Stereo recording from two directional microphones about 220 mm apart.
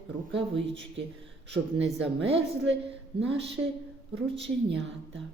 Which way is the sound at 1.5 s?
55° right (ahead or behind).